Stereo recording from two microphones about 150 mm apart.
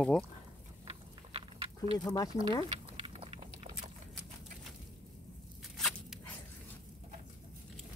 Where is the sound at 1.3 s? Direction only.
40° right (ahead or behind).